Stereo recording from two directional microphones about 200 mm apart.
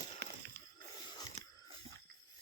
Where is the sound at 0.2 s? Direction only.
55° right (ahead or behind).